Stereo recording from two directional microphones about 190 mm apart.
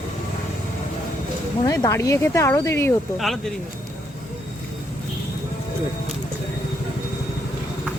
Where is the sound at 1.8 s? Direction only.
15° left (ahead or behind).